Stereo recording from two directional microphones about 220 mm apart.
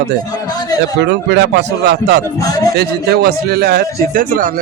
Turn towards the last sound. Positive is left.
turn(degrees=-40)  # may be behind; listen again after turning